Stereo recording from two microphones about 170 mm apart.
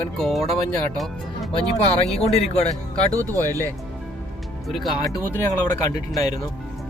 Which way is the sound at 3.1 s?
20° right (ahead or behind).